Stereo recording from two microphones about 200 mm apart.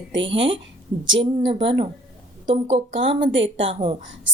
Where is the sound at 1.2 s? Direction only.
25° right (ahead or behind).